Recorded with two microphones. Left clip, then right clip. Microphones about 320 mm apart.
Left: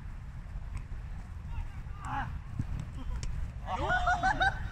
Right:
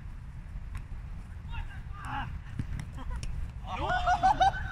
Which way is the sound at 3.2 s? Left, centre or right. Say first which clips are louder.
Left 1 dB; centre.